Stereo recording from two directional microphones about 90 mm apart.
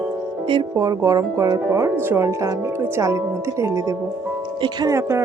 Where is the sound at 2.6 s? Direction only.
25° right (ahead or behind).